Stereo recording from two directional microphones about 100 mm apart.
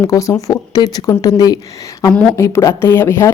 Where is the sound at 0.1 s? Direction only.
35° left (ahead or behind).